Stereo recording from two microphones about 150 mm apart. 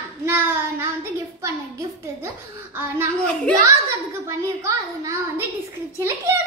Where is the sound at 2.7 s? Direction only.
15° right (ahead or behind).